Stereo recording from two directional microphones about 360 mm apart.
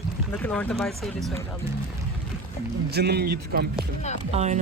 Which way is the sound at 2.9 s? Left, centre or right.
Right.